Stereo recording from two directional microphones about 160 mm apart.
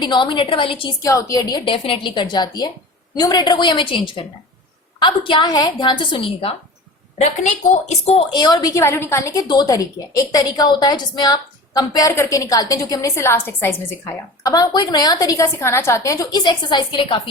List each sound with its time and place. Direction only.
0.0 s a woman's voice: 30° left (ahead or behind)
1.0 s a woman's voice: 20° left (ahead or behind)
4.9 s a woman's voice: 30° left (ahead or behind)
7.2 s a woman's voice: 45° left (ahead or behind)
8.4 s a woman's voice: 25° left (ahead or behind)